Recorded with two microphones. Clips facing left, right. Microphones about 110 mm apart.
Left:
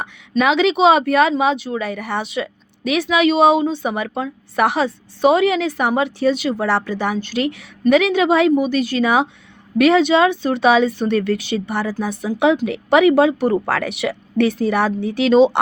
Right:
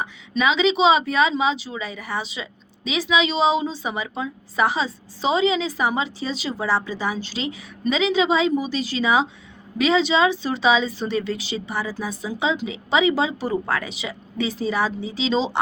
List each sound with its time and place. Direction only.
0.0 s speech: 65° left (ahead or behind)